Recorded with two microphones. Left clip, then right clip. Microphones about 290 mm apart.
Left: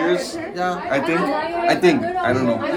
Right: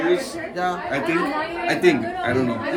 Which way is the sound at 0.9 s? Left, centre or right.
Centre.